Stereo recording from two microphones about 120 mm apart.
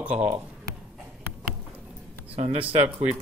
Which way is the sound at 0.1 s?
70° right (ahead or behind).